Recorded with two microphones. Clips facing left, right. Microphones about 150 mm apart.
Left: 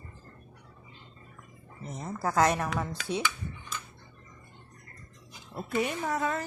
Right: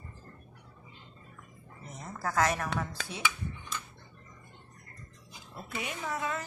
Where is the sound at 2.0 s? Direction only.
25° left (ahead or behind).